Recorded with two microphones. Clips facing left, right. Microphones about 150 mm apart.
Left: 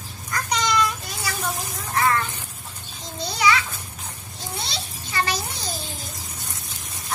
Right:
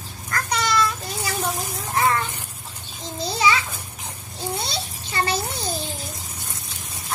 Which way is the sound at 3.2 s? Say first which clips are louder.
Even; 30° right (ahead or behind).